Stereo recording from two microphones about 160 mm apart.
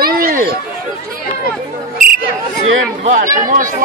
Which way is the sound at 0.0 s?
65° right (ahead or behind).